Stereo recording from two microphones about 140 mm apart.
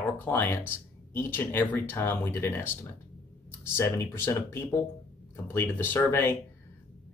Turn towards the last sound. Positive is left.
turn(degrees=15)  # may be behind; listen again after turning